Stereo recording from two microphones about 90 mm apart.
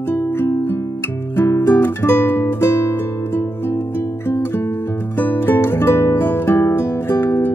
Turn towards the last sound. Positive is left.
turn(degrees=25)  # may be behind; listen again after turning